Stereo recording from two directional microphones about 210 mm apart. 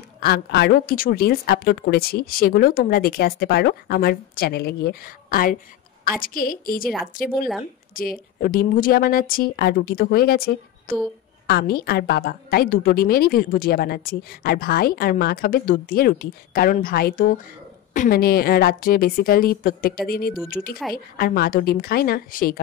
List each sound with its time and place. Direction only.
0.2 s a woman's voice: 50° left (ahead or behind)
7.9 s a woman's voice: 40° left (ahead or behind)